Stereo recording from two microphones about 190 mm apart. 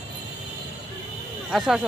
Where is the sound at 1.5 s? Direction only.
Centre (ahead or behind).